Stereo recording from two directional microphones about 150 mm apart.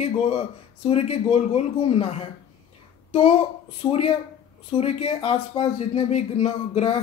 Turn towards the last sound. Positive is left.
turn(degrees=40)  # may be behind; listen again after turning